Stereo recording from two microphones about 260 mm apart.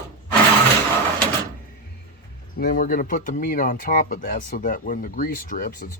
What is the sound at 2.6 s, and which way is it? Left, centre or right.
Speech, left.